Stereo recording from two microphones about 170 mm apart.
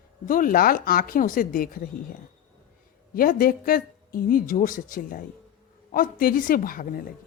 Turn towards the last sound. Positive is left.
turn(degrees=55)  # may be behind; listen again after turning